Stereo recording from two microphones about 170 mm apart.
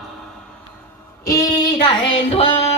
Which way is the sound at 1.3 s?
20° left (ahead or behind).